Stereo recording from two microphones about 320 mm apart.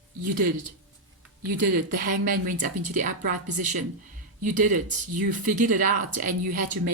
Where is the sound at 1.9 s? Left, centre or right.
Right.